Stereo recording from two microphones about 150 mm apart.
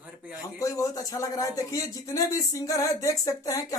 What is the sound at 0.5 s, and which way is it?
Speech, 20° left (ahead or behind).